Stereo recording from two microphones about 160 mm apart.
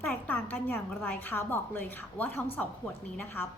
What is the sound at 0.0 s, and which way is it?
A woman's voice, 5° left (ahead or behind).